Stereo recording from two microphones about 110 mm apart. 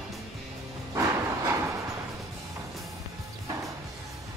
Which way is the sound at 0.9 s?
30° right (ahead or behind).